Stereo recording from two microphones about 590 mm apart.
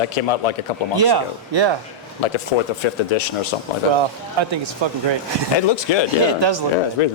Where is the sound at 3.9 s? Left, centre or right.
Right.